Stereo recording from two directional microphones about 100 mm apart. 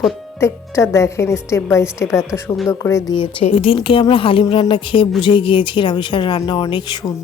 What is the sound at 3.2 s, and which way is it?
A woman's voice, 65° left (ahead or behind).